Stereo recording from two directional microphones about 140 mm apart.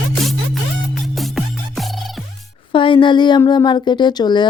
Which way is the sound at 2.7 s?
35° left (ahead or behind).